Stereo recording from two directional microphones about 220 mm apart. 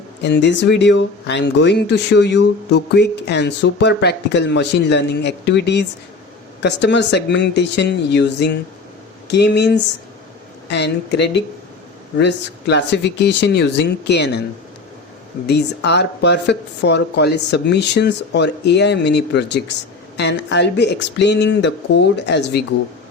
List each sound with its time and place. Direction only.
0.2 s speech: 50° left (ahead or behind)
15.4 s speech: 50° left (ahead or behind)